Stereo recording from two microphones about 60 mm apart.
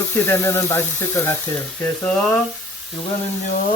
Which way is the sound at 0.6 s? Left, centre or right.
Left.